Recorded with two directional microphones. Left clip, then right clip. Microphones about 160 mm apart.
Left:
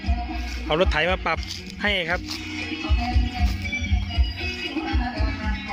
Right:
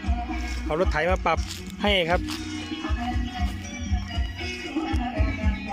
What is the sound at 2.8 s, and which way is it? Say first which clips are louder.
Music: left 2 dB; 5° left (ahead or behind).